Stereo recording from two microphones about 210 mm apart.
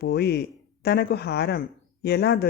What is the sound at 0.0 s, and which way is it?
Speech, 50° left (ahead or behind).